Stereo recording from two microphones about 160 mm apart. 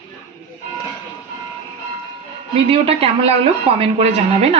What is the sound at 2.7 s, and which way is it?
Speech, 35° right (ahead or behind).